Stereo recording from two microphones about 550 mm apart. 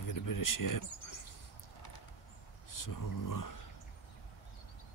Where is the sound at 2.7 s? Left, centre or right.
Left.